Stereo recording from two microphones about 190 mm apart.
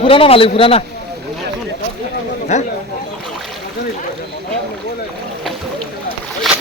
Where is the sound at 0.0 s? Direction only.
30° left (ahead or behind).